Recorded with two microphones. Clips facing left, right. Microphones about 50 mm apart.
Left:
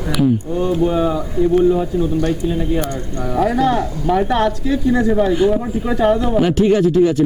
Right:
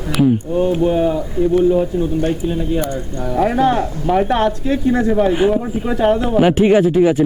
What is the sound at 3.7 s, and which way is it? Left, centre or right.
Speech, centre.